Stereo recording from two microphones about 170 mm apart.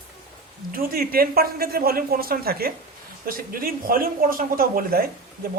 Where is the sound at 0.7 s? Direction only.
60° right (ahead or behind).